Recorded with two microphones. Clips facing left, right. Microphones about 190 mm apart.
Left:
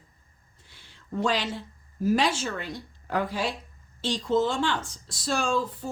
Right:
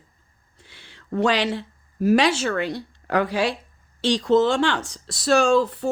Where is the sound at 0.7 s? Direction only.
75° right (ahead or behind).